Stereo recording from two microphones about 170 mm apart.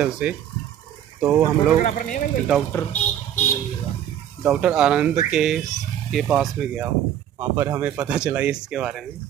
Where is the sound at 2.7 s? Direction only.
10° left (ahead or behind).